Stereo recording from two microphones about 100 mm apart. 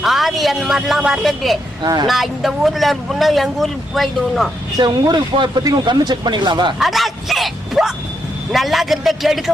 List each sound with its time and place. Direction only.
0.0 s a woman's voice: centre (ahead or behind)
1.8 s speech: 45° right (ahead or behind)
2.0 s speech: centre (ahead or behind)
4.8 s speech: 45° right (ahead or behind)
6.7 s speech: centre (ahead or behind)